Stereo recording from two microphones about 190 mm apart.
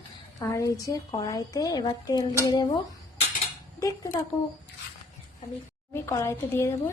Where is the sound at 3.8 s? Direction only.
20° left (ahead or behind).